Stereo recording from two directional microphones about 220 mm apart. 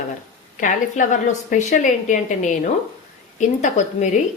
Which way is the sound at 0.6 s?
35° left (ahead or behind).